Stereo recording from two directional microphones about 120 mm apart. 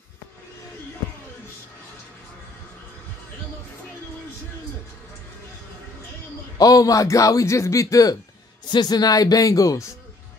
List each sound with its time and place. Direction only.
6.6 s speech: 30° left (ahead or behind)